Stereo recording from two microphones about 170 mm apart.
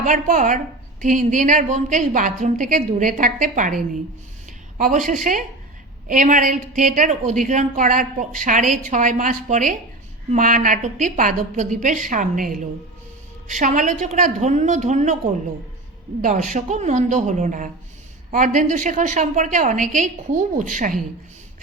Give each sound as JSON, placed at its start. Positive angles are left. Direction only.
{"t": 0.0, "sound": "a woman's voice", "side_deg": -50}
{"t": 4.8, "sound": "a woman's voice", "side_deg": -50}
{"t": 16.2, "sound": "a woman's voice", "side_deg": -45}